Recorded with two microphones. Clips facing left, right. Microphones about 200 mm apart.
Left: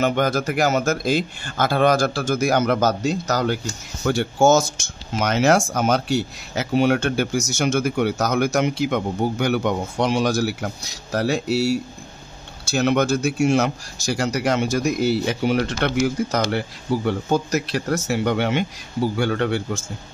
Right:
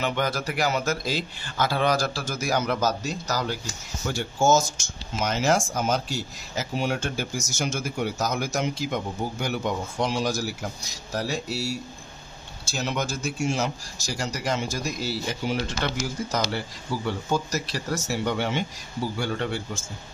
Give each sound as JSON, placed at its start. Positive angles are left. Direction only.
{"t": 0.0, "sound": "a man's voice", "side_deg": 45}